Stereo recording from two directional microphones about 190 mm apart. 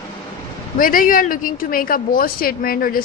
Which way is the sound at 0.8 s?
45° left (ahead or behind).